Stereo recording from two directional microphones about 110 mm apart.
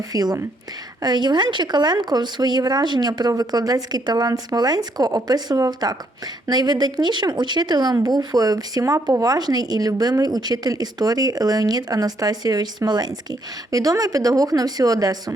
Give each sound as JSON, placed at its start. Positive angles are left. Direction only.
{"t": 0.1, "sound": "speech", "side_deg": -35}